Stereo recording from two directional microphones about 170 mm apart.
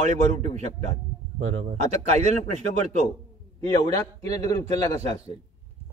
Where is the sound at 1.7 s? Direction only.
40° right (ahead or behind).